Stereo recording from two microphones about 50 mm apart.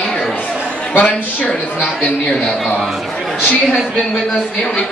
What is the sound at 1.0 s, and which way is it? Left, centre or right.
Speech, left.